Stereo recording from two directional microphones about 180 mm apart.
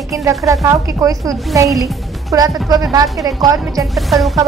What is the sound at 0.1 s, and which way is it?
A woman's voice, 15° right (ahead or behind).